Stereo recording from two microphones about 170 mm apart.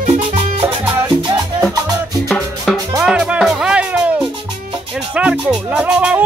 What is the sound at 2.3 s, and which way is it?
Music, centre (ahead or behind).